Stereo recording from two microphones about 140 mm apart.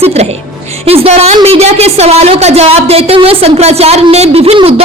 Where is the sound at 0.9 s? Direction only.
50° right (ahead or behind).